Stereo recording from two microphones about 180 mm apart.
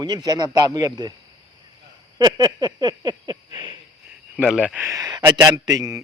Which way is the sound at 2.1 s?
20° right (ahead or behind).